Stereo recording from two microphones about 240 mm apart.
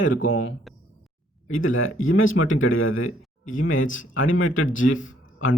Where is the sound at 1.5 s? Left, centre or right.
Left.